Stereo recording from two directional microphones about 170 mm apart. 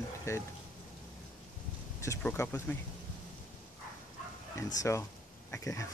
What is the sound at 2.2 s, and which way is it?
Speech, 10° left (ahead or behind).